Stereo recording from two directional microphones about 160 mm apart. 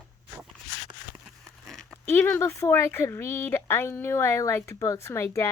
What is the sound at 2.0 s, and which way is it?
Speech, 10° left (ahead or behind).